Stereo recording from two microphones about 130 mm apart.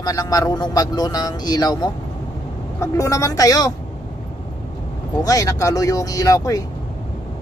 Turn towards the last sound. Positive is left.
turn(degrees=25)  # may be behind; listen again after turning